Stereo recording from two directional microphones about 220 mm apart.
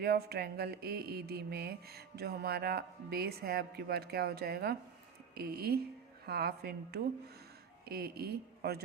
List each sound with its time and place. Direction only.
0.0 s mantra: 45° right (ahead or behind)